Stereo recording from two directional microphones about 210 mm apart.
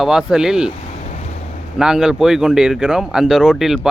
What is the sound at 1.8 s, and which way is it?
Speech, 5° right (ahead or behind).